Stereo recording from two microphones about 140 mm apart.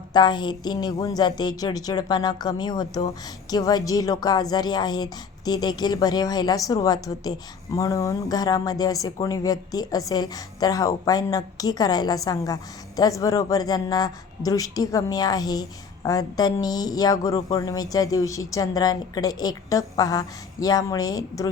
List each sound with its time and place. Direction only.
0.1 s a woman's voice: 30° left (ahead or behind)